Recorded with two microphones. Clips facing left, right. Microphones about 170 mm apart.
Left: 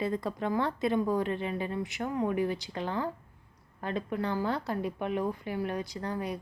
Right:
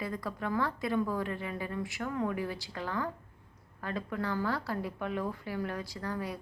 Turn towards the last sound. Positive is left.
turn(degrees=20)  # may be behind; listen again after turning